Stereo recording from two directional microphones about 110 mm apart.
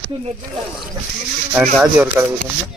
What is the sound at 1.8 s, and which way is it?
Speech, 20° right (ahead or behind).